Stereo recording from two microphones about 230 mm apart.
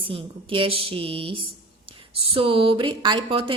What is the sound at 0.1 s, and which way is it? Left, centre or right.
A woman's voice, right.